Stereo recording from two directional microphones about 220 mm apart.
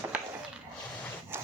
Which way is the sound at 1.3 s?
10° right (ahead or behind).